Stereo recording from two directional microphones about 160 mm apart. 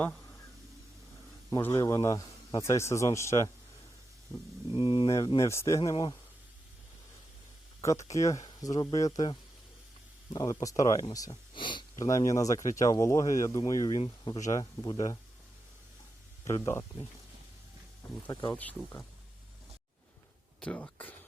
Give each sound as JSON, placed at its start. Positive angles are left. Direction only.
{"t": 1.5, "sound": "speech", "side_deg": 20}
{"t": 4.7, "sound": "speech", "side_deg": 35}
{"t": 5.4, "sound": "speech", "side_deg": 20}
{"t": 7.8, "sound": "speech", "side_deg": 20}
{"t": 16.6, "sound": "speech", "side_deg": 15}
{"t": 18.3, "sound": "speech", "side_deg": 25}
{"t": 18.5, "sound": "speech", "side_deg": 10}
{"t": 20.6, "sound": "speech", "side_deg": 5}